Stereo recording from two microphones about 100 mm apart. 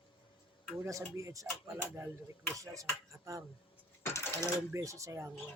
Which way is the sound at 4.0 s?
30° left (ahead or behind).